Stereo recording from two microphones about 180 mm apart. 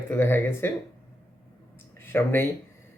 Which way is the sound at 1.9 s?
10° left (ahead or behind).